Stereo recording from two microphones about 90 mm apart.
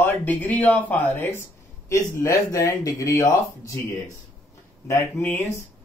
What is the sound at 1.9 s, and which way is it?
Speech, 35° left (ahead or behind).